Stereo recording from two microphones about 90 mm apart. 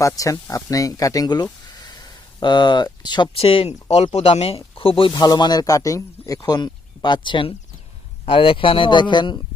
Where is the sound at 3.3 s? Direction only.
90° left.